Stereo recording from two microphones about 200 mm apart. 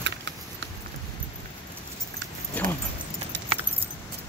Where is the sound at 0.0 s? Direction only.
60° right (ahead or behind).